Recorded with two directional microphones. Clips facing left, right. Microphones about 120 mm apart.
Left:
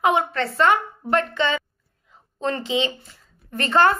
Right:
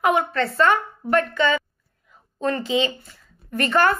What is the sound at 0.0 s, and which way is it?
A woman's voice, 20° left (ahead or behind).